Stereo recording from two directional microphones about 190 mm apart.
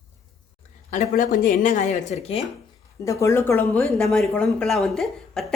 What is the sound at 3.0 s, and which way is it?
A woman's voice, 15° left (ahead or behind).